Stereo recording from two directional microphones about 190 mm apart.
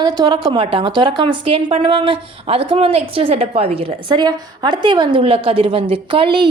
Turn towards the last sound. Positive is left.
turn(degrees=-25)  # may be behind; listen again after turning